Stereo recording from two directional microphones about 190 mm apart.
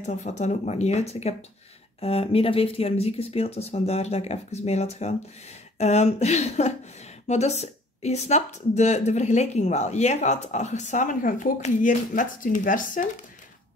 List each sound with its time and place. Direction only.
0.0 s speech: 35° left (ahead or behind)